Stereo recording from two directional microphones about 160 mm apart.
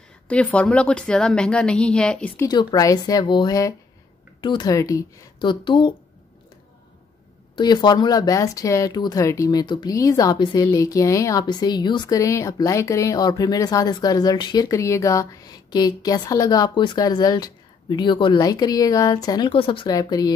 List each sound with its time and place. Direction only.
0.3 s a woman's voice: 10° left (ahead or behind)
2.4 s speech: 25° left (ahead or behind)
7.5 s speech: 25° left (ahead or behind)